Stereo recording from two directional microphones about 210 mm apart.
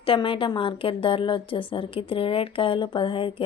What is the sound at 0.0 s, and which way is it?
Speech, 25° left (ahead or behind).